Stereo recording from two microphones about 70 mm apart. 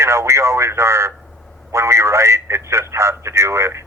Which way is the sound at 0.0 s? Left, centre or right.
Right.